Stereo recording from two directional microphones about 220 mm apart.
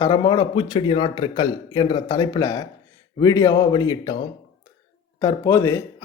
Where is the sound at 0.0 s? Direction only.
20° left (ahead or behind).